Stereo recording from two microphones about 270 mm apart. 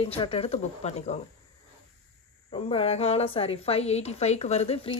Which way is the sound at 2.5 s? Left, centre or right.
Left.